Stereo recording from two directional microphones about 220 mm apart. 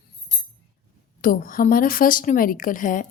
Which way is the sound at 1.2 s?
40° left (ahead or behind).